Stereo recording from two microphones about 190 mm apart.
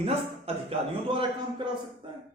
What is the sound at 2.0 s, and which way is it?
Music, 25° right (ahead or behind).